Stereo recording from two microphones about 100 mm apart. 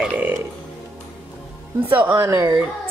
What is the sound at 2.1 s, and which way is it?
Speech, 30° right (ahead or behind).